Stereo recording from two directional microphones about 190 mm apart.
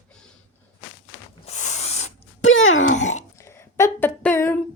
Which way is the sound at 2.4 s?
90° left.